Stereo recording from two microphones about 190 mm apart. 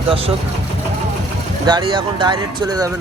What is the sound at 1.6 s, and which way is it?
Speech, 25° right (ahead or behind).